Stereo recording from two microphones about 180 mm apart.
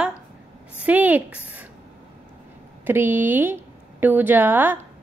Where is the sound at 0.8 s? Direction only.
10° right (ahead or behind).